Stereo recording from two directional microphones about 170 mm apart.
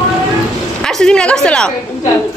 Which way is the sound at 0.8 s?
5° left (ahead or behind).